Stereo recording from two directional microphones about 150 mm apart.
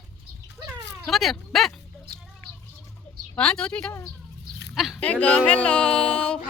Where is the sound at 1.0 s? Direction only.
Centre (ahead or behind).